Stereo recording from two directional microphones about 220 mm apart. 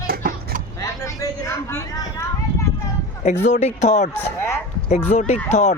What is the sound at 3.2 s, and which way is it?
Speech, 30° left (ahead or behind).